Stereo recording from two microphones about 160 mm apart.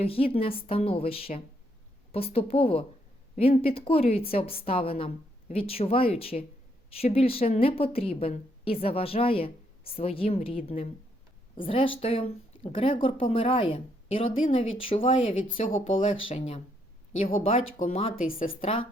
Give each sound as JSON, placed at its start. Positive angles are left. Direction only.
{"t": 0.0, "sound": "a woman's voice", "side_deg": 35}
{"t": 18.3, "sound": "speech", "side_deg": 60}
{"t": 18.6, "sound": "speech", "side_deg": 35}